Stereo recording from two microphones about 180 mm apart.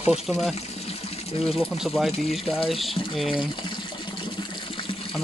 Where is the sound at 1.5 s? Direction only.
Centre (ahead or behind).